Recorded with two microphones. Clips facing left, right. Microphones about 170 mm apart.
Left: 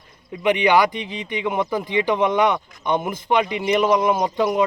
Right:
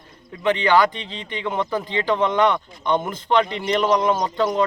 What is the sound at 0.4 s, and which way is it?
Speech, 15° left (ahead or behind).